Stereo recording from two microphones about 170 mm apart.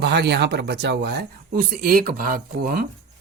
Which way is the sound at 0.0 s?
75° right (ahead or behind).